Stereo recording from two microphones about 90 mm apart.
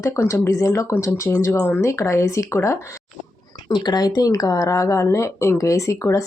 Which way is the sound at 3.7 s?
50° left (ahead or behind).